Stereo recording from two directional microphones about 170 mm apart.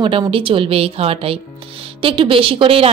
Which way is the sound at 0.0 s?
30° right (ahead or behind).